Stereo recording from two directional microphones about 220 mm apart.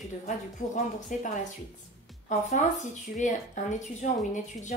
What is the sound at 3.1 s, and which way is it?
Speech, 30° left (ahead or behind).